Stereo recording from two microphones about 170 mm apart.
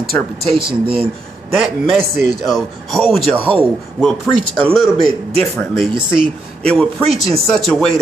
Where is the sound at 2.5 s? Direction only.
Centre (ahead or behind).